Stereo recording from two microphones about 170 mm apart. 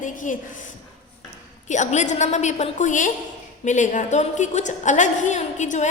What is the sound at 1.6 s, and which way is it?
A woman's voice, 45° left (ahead or behind).